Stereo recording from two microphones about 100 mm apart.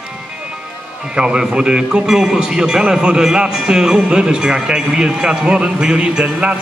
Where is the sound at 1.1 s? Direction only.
10° right (ahead or behind).